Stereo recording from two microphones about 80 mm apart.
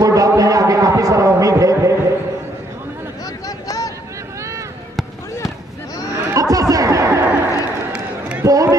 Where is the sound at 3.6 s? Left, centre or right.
Left.